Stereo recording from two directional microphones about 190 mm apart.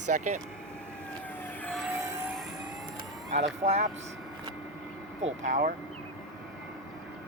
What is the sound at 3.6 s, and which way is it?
Speech, 35° right (ahead or behind).